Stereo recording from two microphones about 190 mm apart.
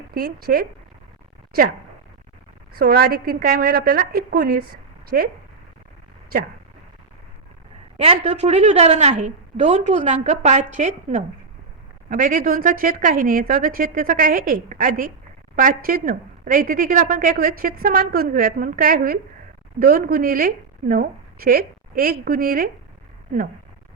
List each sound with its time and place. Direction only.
0.1 s a woman's voice: 50° right (ahead or behind)
2.7 s a woman's voice: 50° right (ahead or behind)
7.9 s a woman's voice: 35° right (ahead or behind)